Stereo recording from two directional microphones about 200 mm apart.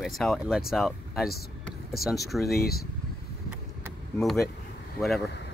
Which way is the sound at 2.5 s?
50° left (ahead or behind).